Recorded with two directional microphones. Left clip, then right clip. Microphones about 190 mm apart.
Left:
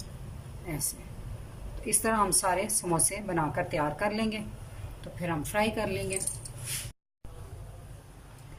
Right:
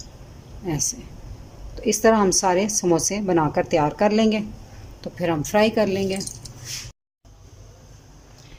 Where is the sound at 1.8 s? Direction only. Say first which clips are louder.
Right 10 dB; 40° right (ahead or behind).